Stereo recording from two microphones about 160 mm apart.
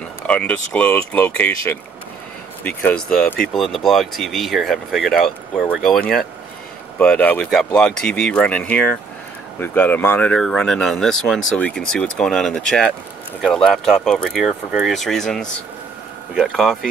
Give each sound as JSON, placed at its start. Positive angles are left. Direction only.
{"t": 0.3, "sound": "speech", "side_deg": 10}